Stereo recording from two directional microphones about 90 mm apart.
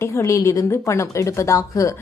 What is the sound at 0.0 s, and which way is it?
A woman's voice, 35° left (ahead or behind).